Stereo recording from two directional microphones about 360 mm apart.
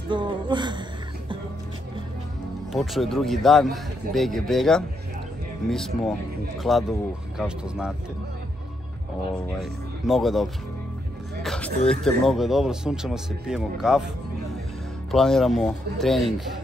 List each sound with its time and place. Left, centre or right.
0.1 s a sound: centre
2.7 s speech: centre
9.6 s speech: centre
15.0 s speech: centre